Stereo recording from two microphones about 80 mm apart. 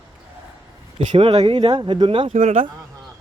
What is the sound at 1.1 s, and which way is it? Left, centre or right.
Speech, right.